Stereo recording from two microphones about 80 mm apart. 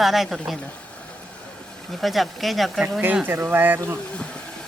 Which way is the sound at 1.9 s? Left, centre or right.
Centre.